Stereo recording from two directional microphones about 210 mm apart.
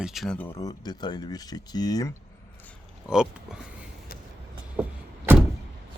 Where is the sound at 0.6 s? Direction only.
20° left (ahead or behind).